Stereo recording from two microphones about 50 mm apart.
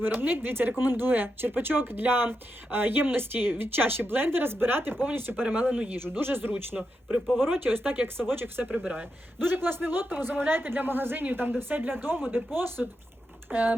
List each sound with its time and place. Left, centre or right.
0.0 s speech: right
5.5 s speech: right
6.0 s speech: right
6.7 s speech: centre
7.3 s speech: right
8.7 s speech: right
9.4 s speech: right